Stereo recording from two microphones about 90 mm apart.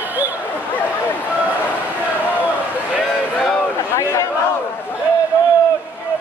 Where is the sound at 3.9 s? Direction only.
30° left (ahead or behind).